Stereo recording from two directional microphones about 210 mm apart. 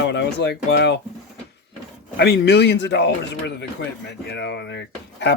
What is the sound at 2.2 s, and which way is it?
Speech, 55° left (ahead or behind).